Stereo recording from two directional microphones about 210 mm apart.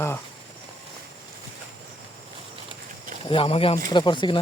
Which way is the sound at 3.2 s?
25° left (ahead or behind).